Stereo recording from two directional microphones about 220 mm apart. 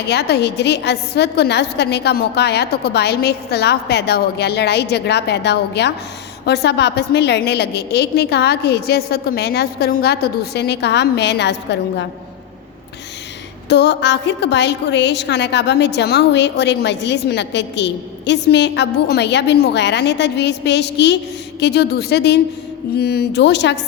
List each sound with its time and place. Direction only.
0.1 s a woman's voice: 50° left (ahead or behind)
13.7 s a woman's voice: 50° left (ahead or behind)